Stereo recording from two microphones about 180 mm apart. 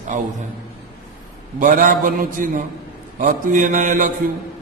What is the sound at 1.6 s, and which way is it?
A man's voice, 50° right (ahead or behind).